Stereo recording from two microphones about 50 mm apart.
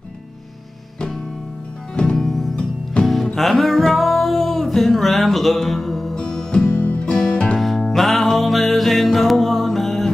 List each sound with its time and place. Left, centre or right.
2.1 s music: centre
2.5 s music: centre
3.3 s music: centre
6.1 s music: centre
7.0 s music: centre
7.5 s music: centre